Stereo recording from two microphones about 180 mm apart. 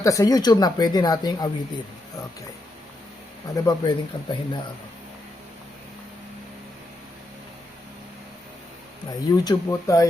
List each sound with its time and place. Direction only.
0.0 s speech: 20° left (ahead or behind)
3.5 s speech: 25° left (ahead or behind)
9.3 s speech: 20° left (ahead or behind)